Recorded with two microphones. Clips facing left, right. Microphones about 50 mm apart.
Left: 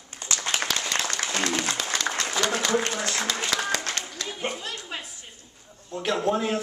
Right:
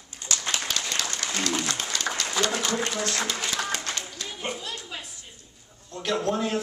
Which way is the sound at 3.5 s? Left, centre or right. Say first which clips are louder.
Left 3 dB; left.